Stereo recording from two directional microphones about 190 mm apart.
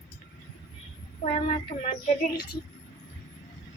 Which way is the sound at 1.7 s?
25° left (ahead or behind).